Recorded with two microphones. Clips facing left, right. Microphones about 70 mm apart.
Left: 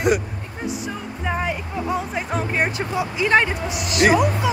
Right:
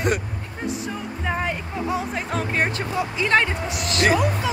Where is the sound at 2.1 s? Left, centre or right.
Centre.